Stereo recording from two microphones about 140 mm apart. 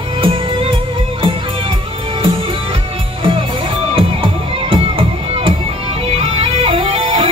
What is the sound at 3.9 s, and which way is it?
Music, 40° right (ahead or behind).